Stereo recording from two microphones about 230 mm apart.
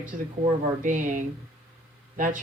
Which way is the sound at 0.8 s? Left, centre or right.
Right.